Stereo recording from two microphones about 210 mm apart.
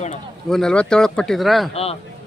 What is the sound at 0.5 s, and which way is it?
Speech, 5° left (ahead or behind).